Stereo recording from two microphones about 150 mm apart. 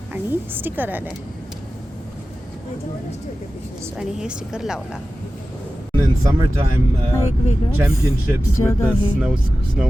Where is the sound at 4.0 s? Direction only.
5° right (ahead or behind).